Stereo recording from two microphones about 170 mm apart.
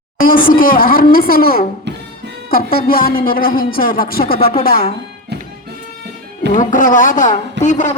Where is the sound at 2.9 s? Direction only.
60° left (ahead or behind).